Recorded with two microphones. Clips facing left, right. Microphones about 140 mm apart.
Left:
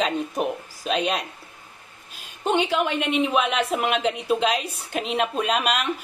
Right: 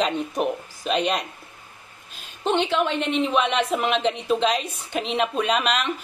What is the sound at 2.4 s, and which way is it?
A woman's voice, 10° left (ahead or behind).